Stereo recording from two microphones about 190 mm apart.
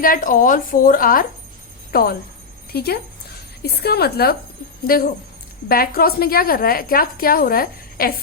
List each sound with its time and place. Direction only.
0.0 s a woman's voice: 45° left (ahead or behind)